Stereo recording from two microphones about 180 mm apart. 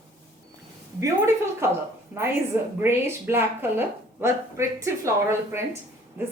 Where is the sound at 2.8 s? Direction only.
15° right (ahead or behind).